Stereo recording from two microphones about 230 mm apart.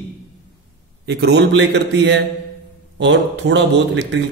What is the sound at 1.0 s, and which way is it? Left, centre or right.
Speech, right.